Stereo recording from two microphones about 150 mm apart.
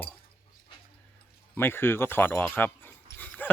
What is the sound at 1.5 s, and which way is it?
Speech, 15° left (ahead or behind).